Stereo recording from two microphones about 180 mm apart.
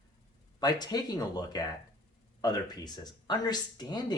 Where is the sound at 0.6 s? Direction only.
20° left (ahead or behind).